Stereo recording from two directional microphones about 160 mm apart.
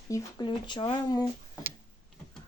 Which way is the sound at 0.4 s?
30° left (ahead or behind).